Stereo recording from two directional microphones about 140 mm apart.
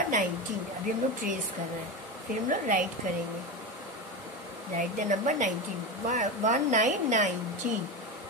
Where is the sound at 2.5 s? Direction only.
70° right (ahead or behind).